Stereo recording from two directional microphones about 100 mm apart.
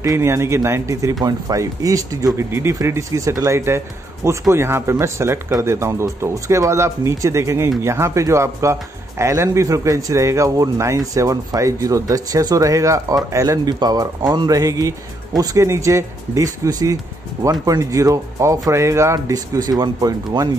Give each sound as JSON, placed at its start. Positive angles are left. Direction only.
{"t": 0.0, "sound": "speech", "side_deg": -30}